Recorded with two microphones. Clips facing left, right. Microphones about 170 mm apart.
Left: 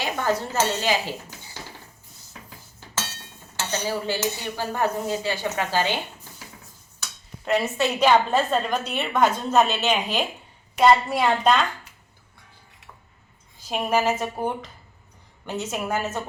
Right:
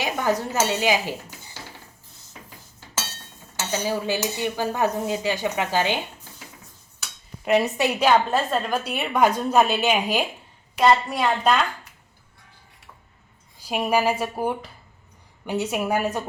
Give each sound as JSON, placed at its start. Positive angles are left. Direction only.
{"t": 0.0, "sound": "speech", "side_deg": -15}
{"t": 3.7, "sound": "a woman's voice", "side_deg": -15}
{"t": 7.4, "sound": "a woman's voice", "side_deg": -15}
{"t": 10.8, "sound": "a woman's voice", "side_deg": 0}
{"t": 13.7, "sound": "a woman's voice", "side_deg": -10}